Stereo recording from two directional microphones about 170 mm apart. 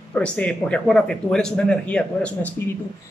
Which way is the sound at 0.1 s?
5° left (ahead or behind).